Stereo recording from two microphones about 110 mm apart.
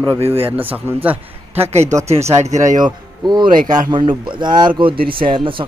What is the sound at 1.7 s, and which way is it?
Speech, 85° right.